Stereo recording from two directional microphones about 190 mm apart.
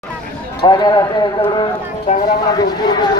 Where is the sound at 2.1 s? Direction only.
40° left (ahead or behind).